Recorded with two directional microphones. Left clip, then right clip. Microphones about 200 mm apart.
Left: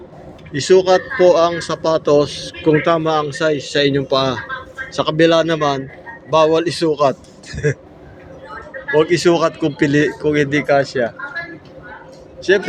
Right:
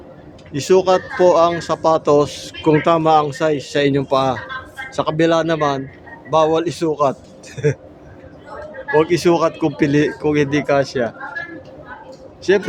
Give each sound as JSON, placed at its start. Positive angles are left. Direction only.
{"t": 0.5, "sound": "speech", "side_deg": -15}
{"t": 8.9, "sound": "speech", "side_deg": -15}
{"t": 12.4, "sound": "a man's voice", "side_deg": -20}